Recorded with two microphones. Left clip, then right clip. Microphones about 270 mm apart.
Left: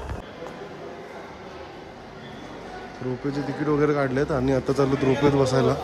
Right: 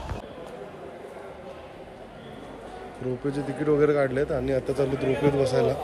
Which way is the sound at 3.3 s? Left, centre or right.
Centre.